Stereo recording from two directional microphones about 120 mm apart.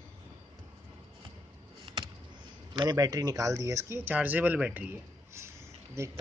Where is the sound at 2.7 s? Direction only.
35° right (ahead or behind).